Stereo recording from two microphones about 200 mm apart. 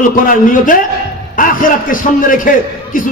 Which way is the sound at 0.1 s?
40° left (ahead or behind).